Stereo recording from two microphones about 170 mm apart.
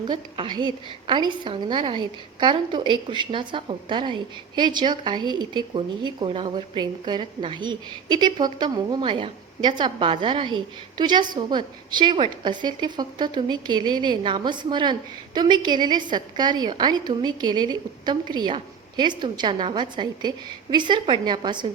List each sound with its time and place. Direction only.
0.0 s a woman's voice: 25° right (ahead or behind)